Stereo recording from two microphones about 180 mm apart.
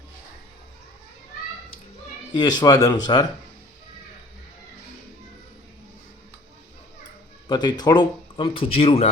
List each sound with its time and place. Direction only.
2.3 s speech: 25° left (ahead or behind)
7.4 s speech: 25° left (ahead or behind)